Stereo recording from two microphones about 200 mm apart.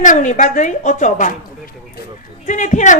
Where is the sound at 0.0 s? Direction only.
40° left (ahead or behind).